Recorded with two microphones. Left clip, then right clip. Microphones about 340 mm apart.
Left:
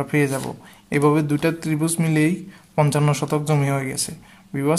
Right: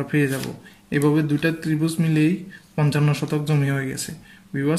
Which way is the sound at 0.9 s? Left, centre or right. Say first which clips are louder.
Left 2 dB; centre.